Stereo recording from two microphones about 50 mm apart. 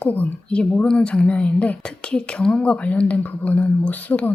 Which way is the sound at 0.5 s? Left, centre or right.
Left.